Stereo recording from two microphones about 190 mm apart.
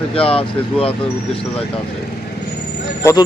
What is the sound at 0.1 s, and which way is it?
Speech, 30° left (ahead or behind).